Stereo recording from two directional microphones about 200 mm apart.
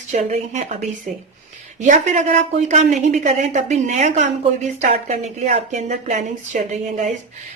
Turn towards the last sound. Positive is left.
turn(degrees=-35)  # may be behind; listen again after turning